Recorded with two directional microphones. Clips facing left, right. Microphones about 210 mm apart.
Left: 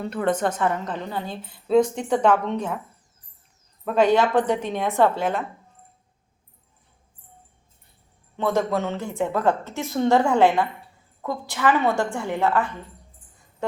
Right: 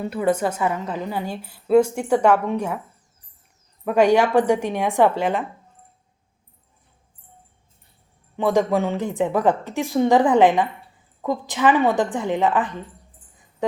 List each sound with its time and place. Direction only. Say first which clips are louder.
0.0 s a woman's voice: right 2 dB; 10° right (ahead or behind)
3.8 s a woman's voice: right 2 dB; 10° right (ahead or behind)
8.4 s a woman's voice: right 4 dB; 15° right (ahead or behind)
13.6 s a sound: right 4 dB; 15° right (ahead or behind)